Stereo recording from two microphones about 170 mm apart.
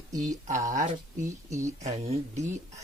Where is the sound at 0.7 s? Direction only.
45° right (ahead or behind).